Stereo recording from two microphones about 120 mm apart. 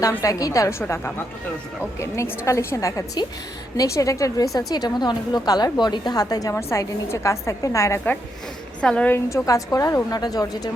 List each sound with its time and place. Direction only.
0.2 s a woman's voice: 30° left (ahead or behind)
6.5 s a woman's voice: 20° left (ahead or behind)
8.8 s a woman's voice: 10° left (ahead or behind); by 10.7 s 30° left (ahead or behind)